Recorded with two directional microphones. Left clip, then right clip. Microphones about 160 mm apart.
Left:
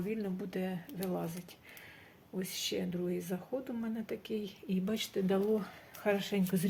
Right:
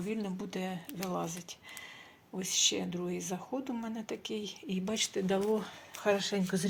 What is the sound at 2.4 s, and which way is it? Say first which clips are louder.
Speech: right 6 dB; 15° left (ahead or behind).